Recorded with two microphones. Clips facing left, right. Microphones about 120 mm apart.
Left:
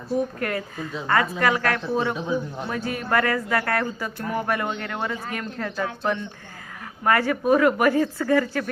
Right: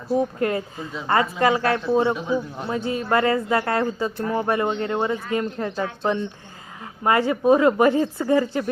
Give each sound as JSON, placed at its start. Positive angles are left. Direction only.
{"t": 0.2, "sound": "speech", "side_deg": -25}